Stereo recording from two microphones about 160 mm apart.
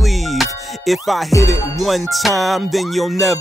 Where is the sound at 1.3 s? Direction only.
20° left (ahead or behind).